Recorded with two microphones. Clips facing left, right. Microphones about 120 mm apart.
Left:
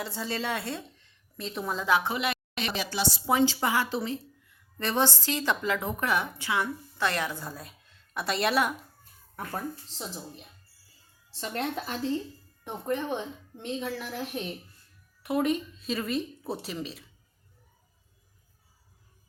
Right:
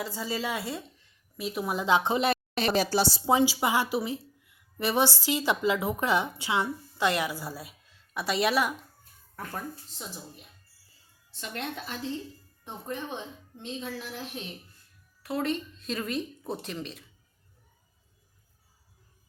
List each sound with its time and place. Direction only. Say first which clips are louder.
0.0 s a woman's voice: even; centre (ahead or behind); by 3.4 s 25° right (ahead or behind)
3.4 s a woman's voice: even; 10° right (ahead or behind)
11.3 s a woman's voice: left 4 dB; 35° left (ahead or behind)
12.6 s a woman's voice: left 6 dB; 60° left (ahead or behind)
15.2 s a woman's voice: left 3 dB; 15° left (ahead or behind)